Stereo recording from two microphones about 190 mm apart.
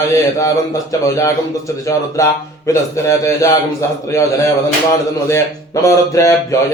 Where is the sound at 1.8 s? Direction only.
15° left (ahead or behind).